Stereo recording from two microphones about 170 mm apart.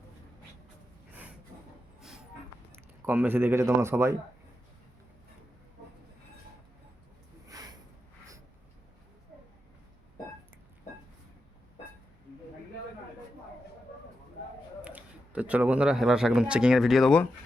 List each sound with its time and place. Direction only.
3.1 s a man's voice: 10° right (ahead or behind)
7.4 s a sound: 20° right (ahead or behind)
14.8 s speech: 5° right (ahead or behind)